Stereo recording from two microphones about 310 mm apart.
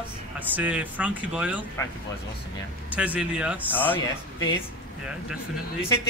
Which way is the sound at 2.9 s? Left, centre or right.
Centre.